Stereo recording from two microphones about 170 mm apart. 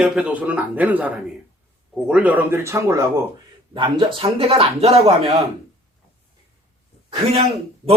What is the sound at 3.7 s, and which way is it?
Speech, 30° right (ahead or behind).